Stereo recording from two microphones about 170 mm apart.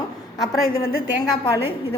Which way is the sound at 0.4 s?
20° left (ahead or behind).